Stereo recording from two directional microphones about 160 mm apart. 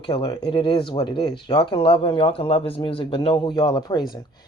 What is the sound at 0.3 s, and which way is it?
Speech, 25° left (ahead or behind).